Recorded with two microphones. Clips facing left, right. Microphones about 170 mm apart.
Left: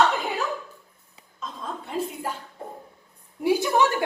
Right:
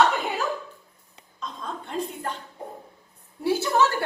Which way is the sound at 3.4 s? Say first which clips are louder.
Left 1 dB; 15° left (ahead or behind).